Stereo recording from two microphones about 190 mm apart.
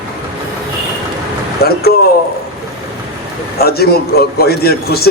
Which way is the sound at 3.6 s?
55° left (ahead or behind).